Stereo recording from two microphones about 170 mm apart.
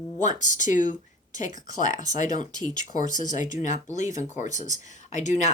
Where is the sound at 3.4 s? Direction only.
45° left (ahead or behind).